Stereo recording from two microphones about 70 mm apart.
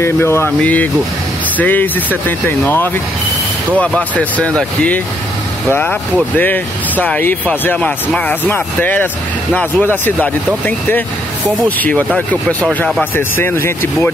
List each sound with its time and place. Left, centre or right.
0.0 s speech: left
0.6 s speech: left
3.7 s speech: centre
7.7 s speech: centre
13.1 s speech: left